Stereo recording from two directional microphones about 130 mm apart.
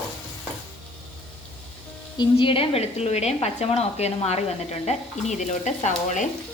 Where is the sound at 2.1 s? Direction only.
40° left (ahead or behind); by 5.9 s 65° left (ahead or behind).